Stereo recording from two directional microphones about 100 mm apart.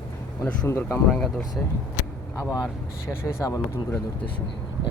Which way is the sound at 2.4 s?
30° left (ahead or behind).